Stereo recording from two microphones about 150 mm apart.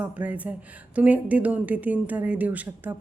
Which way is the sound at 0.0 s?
10° right (ahead or behind).